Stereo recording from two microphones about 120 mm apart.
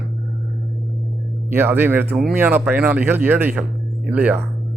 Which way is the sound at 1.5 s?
15° right (ahead or behind).